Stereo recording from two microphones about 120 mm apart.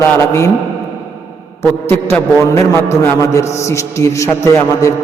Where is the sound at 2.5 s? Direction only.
25° left (ahead or behind).